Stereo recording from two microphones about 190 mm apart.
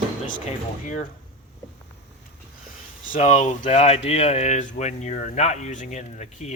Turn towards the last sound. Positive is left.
turn(degrees=35)  # may be behind; listen again after turning